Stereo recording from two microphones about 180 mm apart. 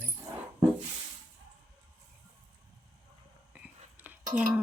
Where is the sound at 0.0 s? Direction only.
10° right (ahead or behind).